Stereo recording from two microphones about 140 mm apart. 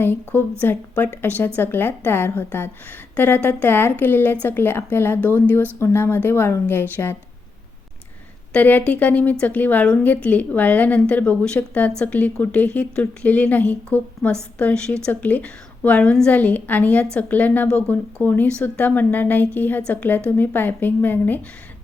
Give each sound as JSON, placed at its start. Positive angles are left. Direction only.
{"t": 0.0, "sound": "speech", "side_deg": 15}
{"t": 8.5, "sound": "a woman's voice", "side_deg": 10}